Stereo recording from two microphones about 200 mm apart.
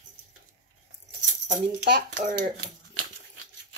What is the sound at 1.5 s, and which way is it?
Speech, 50° right (ahead or behind).